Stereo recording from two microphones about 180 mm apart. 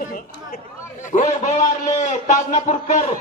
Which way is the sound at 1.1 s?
45° left (ahead or behind).